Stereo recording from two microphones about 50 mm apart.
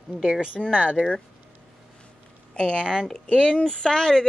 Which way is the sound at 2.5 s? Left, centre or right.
Left.